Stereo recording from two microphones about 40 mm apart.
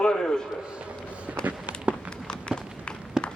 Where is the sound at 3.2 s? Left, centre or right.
Centre.